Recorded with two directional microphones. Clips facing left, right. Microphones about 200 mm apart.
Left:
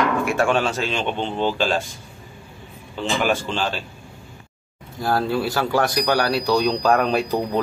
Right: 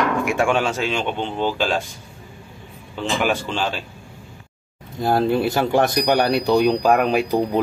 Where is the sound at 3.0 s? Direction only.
10° right (ahead or behind).